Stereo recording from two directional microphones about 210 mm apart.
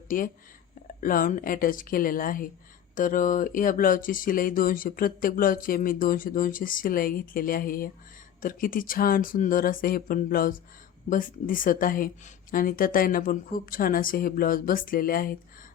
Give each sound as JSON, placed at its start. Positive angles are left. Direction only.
{"t": 1.0, "sound": "a woman's voice", "side_deg": 40}